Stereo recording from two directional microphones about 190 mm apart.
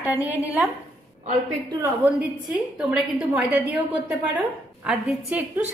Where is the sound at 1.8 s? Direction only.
10° right (ahead or behind).